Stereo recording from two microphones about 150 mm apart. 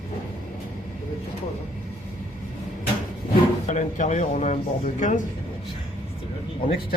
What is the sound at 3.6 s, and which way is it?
Speech, 55° left (ahead or behind).